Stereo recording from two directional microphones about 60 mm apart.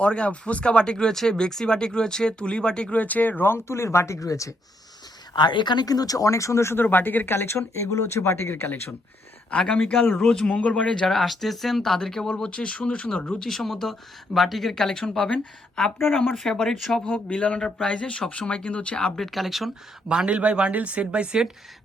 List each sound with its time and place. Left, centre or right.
0.0 s speech: centre
3.0 s speech: left
4.2 s speech: left
5.8 s speech: left
6.7 s speech: left
9.5 s speech: left
10.2 s speech: centre
10.5 s speech: left
11.1 s speech: centre
13.4 s speech: centre
16.3 s speech: centre
17.1 s speech: left; by 19.7 s centre
20.1 s speech: centre